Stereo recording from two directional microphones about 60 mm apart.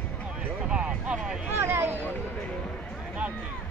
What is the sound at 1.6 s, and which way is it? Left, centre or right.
Speech, right.